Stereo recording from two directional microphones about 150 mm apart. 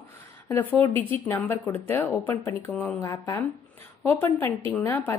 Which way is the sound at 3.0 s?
20° left (ahead or behind).